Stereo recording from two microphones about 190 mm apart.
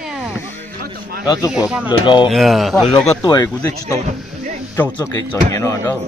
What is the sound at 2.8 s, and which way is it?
Speech, 25° left (ahead or behind).